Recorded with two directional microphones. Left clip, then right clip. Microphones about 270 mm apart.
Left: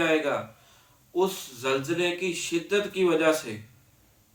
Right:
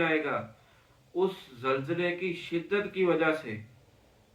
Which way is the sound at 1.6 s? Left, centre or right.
Centre.